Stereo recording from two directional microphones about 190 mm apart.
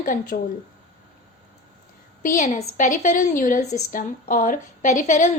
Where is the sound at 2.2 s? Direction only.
40° left (ahead or behind).